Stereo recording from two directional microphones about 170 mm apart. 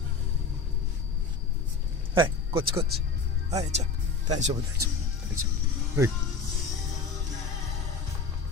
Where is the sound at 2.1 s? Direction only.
30° right (ahead or behind).